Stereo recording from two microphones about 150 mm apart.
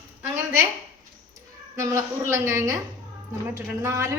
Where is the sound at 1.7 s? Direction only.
20° right (ahead or behind).